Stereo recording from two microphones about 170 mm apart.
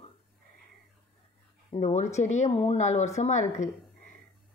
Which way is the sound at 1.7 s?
40° left (ahead or behind).